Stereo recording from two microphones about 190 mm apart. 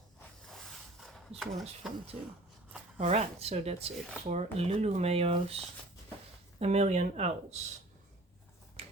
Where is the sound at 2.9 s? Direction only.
35° right (ahead or behind).